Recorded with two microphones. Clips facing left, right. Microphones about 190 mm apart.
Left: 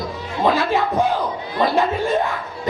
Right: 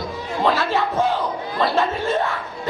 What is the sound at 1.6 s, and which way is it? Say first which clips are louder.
Chuckle: left 2 dB; 15° left (ahead or behind).